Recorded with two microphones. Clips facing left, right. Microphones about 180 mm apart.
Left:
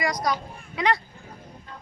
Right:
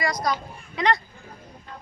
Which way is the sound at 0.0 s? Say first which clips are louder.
Even; 15° left (ahead or behind).